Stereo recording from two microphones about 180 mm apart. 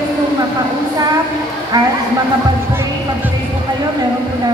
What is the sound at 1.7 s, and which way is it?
Speech, 20° right (ahead or behind).